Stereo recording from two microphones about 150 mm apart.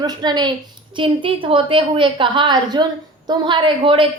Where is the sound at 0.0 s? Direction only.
25° right (ahead or behind).